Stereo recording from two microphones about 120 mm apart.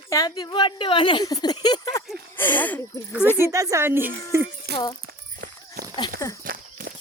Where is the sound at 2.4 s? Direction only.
15° left (ahead or behind).